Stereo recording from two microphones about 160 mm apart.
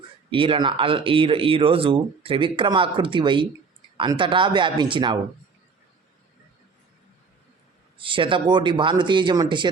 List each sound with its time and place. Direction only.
0.3 s speech: 35° right (ahead or behind)
7.9 s speech: 30° right (ahead or behind)